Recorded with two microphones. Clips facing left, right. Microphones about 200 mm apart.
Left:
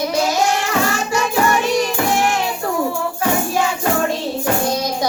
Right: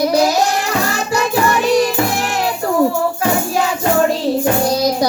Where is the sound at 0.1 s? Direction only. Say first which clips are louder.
Right 4 dB; 35° right (ahead or behind).